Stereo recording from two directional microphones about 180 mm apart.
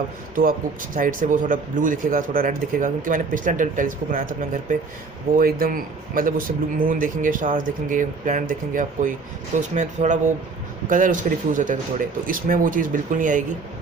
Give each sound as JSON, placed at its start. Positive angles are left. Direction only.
{"t": 0.9, "sound": "speech", "side_deg": -50}